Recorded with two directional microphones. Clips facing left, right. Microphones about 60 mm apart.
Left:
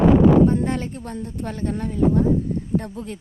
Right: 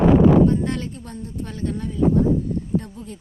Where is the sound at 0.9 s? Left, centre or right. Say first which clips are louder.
Left 2 dB; left.